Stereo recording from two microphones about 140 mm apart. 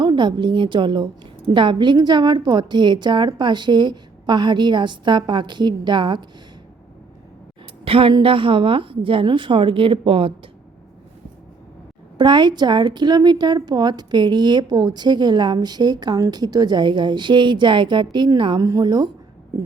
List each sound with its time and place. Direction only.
0.0 s a woman's voice: 35° right (ahead or behind)
7.9 s a woman's voice: 40° right (ahead or behind)
12.1 s a woman's voice: 35° right (ahead or behind)